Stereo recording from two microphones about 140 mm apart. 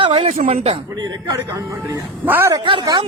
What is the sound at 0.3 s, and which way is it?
Speech, 65° right (ahead or behind).